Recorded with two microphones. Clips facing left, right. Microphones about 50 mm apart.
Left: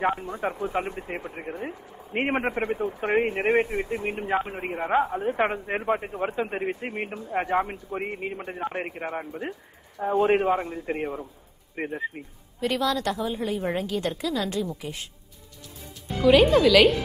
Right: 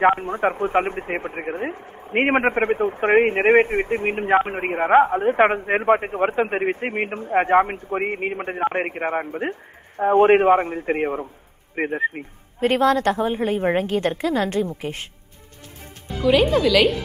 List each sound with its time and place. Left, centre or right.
0.0 s a man's voice: right
16.2 s speech: centre